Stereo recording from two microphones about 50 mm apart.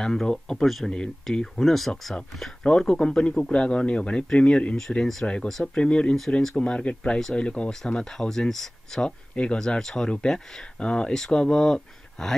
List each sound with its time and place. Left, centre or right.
0.0 s speech: centre
1.3 s speech: centre
2.6 s speech: centre
4.7 s speech: centre
5.2 s speech: left
9.3 s speech: left
9.6 s speech: centre